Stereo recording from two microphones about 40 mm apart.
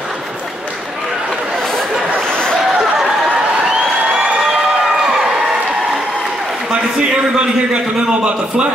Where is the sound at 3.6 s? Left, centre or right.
Centre.